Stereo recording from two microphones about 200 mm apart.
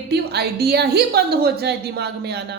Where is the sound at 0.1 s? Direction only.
55° right (ahead or behind).